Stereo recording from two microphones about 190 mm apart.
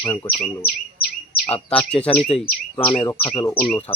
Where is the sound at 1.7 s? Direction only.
5° left (ahead or behind).